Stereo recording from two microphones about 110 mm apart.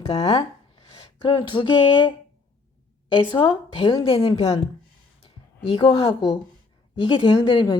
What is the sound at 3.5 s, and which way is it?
Speech, 55° left (ahead or behind).